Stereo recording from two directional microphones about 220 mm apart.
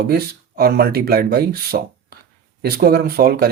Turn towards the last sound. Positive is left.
turn(degrees=-45)  # may be behind; listen again after turning